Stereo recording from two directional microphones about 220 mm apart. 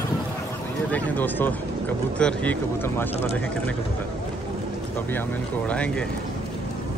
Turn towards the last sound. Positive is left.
turn(degrees=5)  # may be behind; listen again after turning